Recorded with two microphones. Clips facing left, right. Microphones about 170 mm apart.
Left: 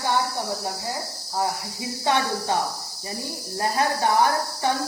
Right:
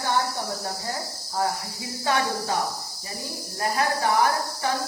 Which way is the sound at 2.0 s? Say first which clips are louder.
Left 1 dB; 25° left (ahead or behind).